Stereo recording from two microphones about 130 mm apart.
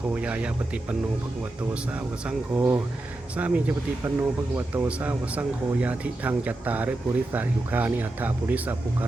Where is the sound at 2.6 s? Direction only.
20° right (ahead or behind).